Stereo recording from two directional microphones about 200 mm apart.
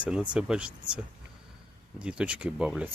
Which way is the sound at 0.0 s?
5° right (ahead or behind).